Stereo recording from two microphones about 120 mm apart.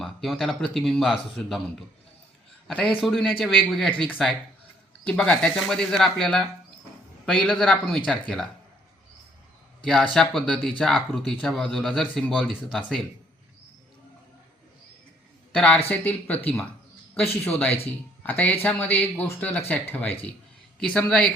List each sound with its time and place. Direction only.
0.0 s speech: centre (ahead or behind)
2.6 s a man's voice: 5° left (ahead or behind)
5.0 s speech: 10° left (ahead or behind)
9.8 s speech: 5° left (ahead or behind)
15.5 s speech: 10° left (ahead or behind)